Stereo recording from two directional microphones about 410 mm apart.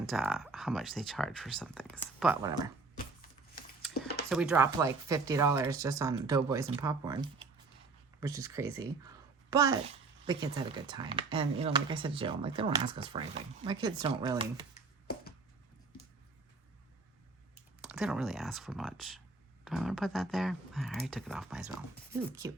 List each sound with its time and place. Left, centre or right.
0.0 s speech: centre
2.9 s chopping: left
4.3 s speech: centre
17.8 s speech: centre